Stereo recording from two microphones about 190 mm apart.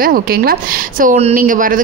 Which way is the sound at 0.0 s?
50° right (ahead or behind).